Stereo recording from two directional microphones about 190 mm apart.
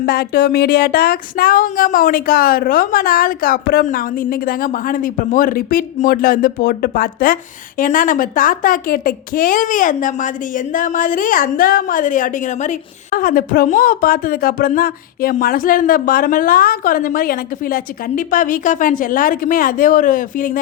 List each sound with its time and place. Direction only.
0.0 s a woman's voice: 55° left (ahead or behind)